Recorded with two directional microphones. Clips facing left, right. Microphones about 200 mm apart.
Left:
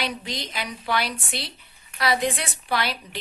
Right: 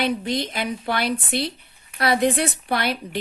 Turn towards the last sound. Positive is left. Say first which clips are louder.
# right 3 dB
turn(degrees=-55)  # may be behind; listen again after turning